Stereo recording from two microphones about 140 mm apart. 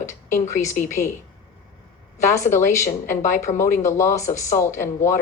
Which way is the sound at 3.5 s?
25° left (ahead or behind).